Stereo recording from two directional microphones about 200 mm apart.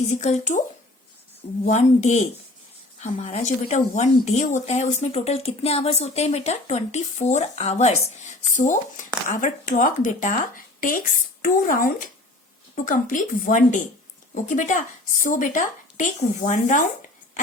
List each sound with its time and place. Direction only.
0.1 s speech: 35° left (ahead or behind)
1.6 s speech: 35° left (ahead or behind)